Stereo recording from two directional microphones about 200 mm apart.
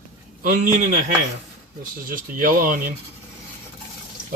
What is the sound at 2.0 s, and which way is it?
Speech, 45° right (ahead or behind).